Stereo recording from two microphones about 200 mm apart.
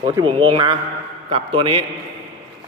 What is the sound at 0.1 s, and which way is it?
A man's voice, 25° right (ahead or behind).